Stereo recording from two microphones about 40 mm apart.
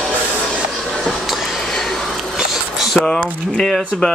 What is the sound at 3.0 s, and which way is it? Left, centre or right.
Speech, centre.